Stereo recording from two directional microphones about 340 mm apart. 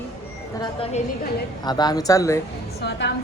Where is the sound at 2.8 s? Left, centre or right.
Left.